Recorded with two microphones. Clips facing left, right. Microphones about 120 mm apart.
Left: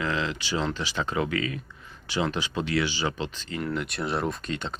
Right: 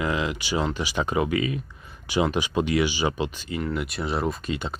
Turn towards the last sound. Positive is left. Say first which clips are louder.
# right 2 dB
turn(degrees=-5)  # may be behind; listen again after turning